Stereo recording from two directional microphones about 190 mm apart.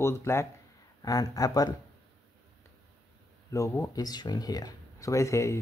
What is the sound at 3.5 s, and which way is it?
Speech, 15° left (ahead or behind).